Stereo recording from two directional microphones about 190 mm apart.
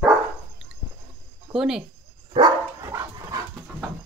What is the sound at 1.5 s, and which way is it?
Speech, 5° right (ahead or behind).